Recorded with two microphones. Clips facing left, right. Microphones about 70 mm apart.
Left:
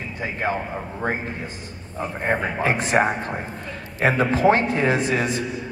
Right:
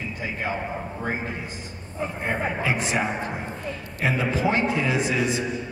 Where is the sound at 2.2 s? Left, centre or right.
Left.